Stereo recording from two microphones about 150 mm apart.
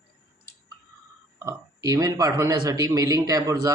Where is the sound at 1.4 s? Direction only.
20° right (ahead or behind).